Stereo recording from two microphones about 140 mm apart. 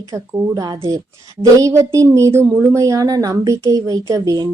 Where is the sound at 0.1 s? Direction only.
25° right (ahead or behind).